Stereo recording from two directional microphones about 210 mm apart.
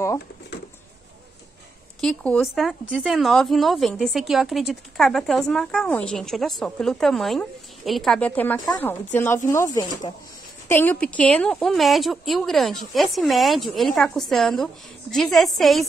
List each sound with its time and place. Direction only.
2.0 s speech: 5° left (ahead or behind)